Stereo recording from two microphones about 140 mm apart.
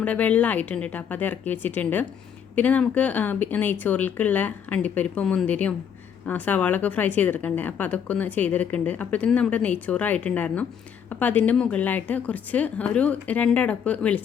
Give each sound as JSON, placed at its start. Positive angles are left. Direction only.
{"t": 0.0, "sound": "a woman's voice", "side_deg": 10}